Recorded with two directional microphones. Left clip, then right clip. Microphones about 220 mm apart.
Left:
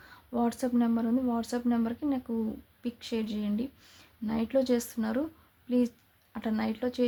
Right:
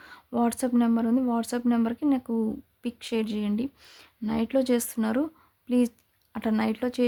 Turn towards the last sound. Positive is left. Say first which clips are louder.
# right 4 dB
turn(degrees=-35)  # may be behind; listen again after turning